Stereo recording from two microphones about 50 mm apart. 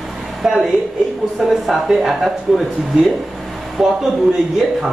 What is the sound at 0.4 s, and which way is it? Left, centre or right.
Speech, centre.